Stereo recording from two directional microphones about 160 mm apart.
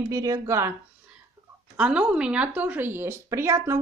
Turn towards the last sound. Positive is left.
turn(degrees=-15)  # may be behind; listen again after turning